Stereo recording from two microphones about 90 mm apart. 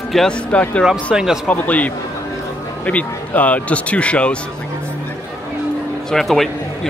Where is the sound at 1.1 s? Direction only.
5° right (ahead or behind).